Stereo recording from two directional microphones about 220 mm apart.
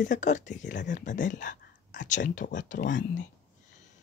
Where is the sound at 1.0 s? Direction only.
35° left (ahead or behind).